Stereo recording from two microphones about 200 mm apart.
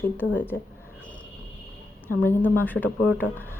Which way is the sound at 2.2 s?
10° left (ahead or behind).